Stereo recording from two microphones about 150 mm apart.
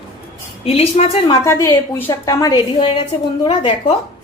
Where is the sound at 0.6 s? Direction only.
40° left (ahead or behind).